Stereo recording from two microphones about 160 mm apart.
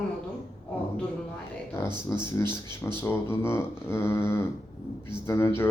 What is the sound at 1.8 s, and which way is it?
Speech, 15° left (ahead or behind).